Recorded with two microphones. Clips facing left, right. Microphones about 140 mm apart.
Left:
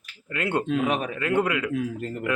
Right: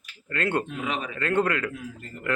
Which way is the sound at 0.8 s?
50° left (ahead or behind).